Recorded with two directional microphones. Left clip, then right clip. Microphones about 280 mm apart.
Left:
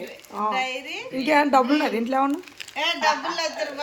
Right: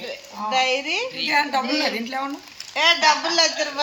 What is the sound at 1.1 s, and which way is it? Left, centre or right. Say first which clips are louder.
A woman's voice: left 5 dB; centre.